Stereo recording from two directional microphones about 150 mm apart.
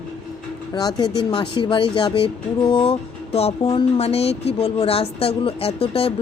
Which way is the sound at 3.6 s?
25° left (ahead or behind).